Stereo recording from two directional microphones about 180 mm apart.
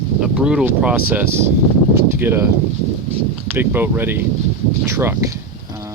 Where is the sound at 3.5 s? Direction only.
10° right (ahead or behind).